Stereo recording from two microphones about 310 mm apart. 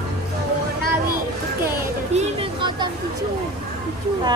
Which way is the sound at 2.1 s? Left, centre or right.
Centre.